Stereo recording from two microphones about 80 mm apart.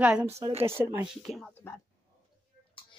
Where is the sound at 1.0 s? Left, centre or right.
Centre.